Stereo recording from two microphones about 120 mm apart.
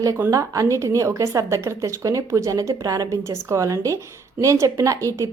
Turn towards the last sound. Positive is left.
turn(degrees=-25)  # may be behind; listen again after turning